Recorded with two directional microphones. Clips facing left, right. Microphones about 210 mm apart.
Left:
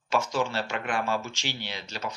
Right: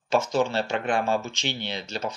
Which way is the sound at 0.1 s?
25° right (ahead or behind).